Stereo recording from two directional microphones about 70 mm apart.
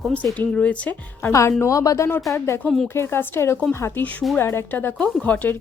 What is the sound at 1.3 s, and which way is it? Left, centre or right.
Speech, left.